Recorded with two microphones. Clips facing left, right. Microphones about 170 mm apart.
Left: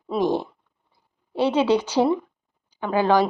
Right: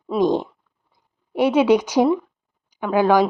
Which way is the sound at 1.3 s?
10° right (ahead or behind).